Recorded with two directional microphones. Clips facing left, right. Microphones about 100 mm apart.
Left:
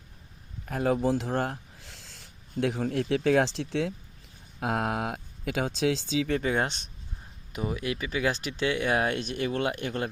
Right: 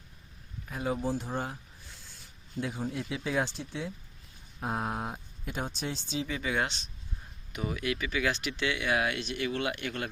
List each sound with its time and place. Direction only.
0.6 s speech: 60° left (ahead or behind); by 3.9 s 85° left
4.6 s speech: 70° left (ahead or behind)
6.5 s speech: 45° left (ahead or behind)
7.5 s speech: 25° left (ahead or behind)